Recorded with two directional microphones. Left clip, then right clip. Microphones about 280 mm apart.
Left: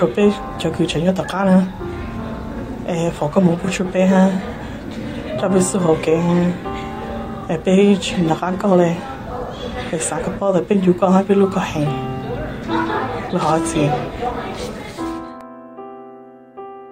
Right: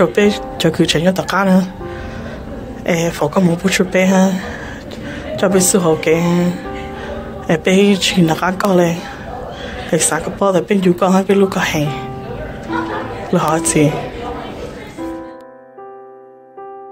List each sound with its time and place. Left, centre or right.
0.0 s speech: right
2.9 s speech: right
7.4 s speech: right
9.9 s speech: right
13.3 s speech: right